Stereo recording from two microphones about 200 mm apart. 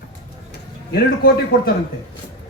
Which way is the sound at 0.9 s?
50° left (ahead or behind).